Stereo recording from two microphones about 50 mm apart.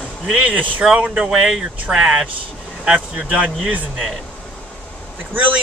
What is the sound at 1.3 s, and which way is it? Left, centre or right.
Speech, centre.